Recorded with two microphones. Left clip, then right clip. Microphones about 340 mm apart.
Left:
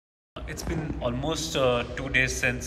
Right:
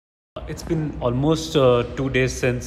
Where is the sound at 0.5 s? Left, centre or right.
Centre.